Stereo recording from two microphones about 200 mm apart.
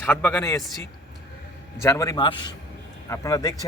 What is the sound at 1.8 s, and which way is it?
Speech, 15° left (ahead or behind).